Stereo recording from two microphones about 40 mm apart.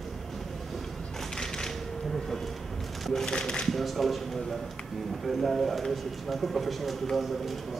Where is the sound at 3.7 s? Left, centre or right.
Centre.